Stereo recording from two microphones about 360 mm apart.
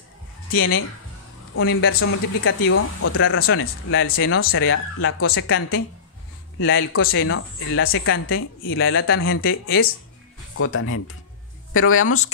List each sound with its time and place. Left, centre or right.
0.5 s speech: left